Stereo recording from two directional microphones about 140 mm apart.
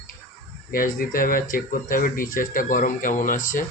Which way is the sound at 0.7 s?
90° left.